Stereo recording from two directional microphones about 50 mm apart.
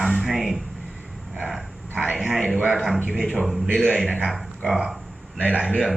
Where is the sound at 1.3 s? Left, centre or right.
Centre.